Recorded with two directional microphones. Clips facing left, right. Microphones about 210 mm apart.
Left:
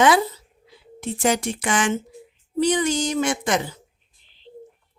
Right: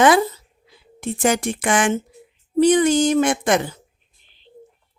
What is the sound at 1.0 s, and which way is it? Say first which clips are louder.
Speech: right 2 dB; 50° right (ahead or behind).